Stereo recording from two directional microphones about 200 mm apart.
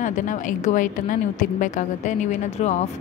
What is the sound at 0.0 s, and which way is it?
A woman's voice, 40° left (ahead or behind).